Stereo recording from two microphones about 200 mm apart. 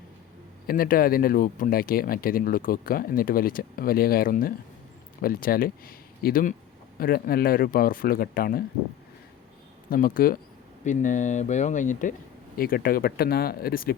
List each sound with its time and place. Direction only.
0.7 s speech: 45° left (ahead or behind)
9.9 s speech: 45° left (ahead or behind)